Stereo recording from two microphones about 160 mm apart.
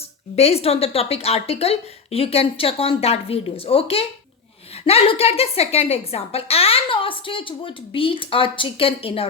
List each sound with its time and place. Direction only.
0.3 s a woman's voice: 40° left (ahead or behind)